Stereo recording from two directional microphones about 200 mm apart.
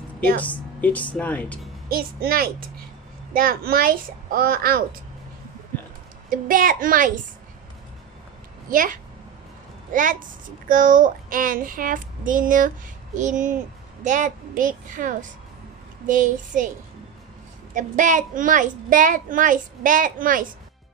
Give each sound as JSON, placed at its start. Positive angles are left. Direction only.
{"t": 0.4, "sound": "a woman's voice", "side_deg": 5}
{"t": 1.9, "sound": "a child's voice", "side_deg": -50}
{"t": 5.7, "sound": "a sound", "side_deg": 10}
{"t": 6.3, "sound": "a child's voice", "side_deg": -45}
{"t": 8.6, "sound": "a child's voice", "side_deg": -40}
{"t": 17.7, "sound": "speech", "side_deg": -40}